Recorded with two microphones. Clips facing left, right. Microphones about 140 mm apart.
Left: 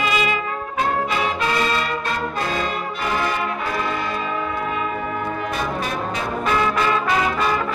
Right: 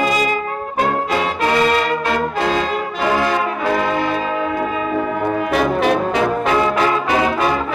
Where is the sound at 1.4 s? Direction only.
60° right (ahead or behind); by 4.2 s 90° right.